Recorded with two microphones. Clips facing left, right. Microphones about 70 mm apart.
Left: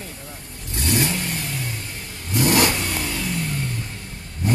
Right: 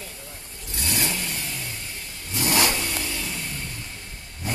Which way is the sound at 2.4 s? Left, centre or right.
Left.